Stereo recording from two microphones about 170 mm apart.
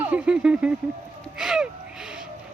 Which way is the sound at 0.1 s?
5° right (ahead or behind).